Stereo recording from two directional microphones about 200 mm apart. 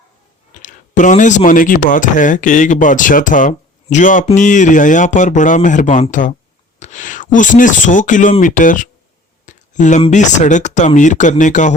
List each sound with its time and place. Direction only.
0.6 s speech: 40° left (ahead or behind)
9.5 s a sound: 40° left (ahead or behind)
10.0 s speech: 35° left (ahead or behind)